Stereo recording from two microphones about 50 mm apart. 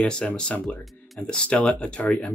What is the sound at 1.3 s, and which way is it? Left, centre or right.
Speech, centre.